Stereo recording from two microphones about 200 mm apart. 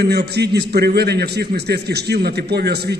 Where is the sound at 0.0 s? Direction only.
55° right (ahead or behind).